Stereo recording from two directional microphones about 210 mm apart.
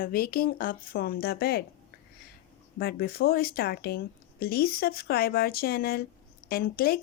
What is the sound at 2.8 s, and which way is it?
Speech, 45° left (ahead or behind).